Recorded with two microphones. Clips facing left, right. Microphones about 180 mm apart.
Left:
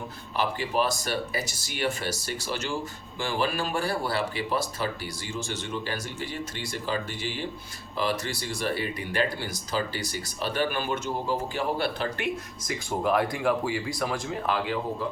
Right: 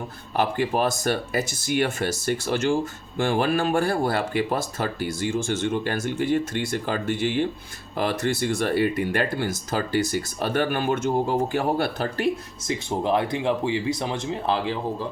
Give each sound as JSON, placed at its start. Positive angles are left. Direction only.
{"t": 0.3, "sound": "speech", "side_deg": -55}